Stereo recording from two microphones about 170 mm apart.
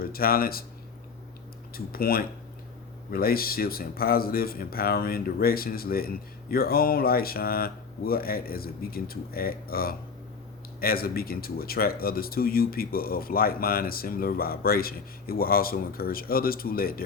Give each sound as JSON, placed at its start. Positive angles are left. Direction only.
{"t": 0.0, "sound": "speech", "side_deg": 60}
{"t": 1.7, "sound": "speech", "side_deg": 60}